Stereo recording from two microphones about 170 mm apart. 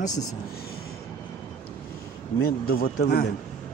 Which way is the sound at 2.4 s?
60° left (ahead or behind).